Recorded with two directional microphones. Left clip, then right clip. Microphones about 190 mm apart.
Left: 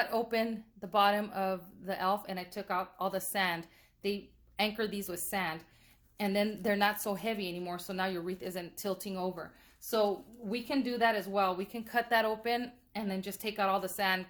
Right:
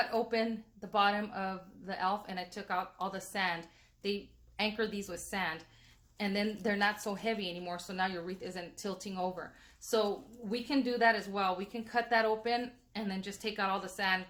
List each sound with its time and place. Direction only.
0.0 s speech: 35° left (ahead or behind)
10.5 s speech: 35° left (ahead or behind)